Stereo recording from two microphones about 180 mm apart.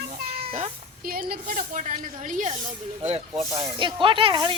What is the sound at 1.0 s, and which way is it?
Speech, 55° right (ahead or behind).